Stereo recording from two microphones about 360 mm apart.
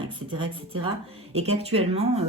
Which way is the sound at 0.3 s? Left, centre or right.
Centre.